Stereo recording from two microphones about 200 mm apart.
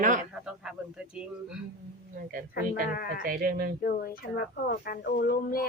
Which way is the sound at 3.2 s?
45° right (ahead or behind).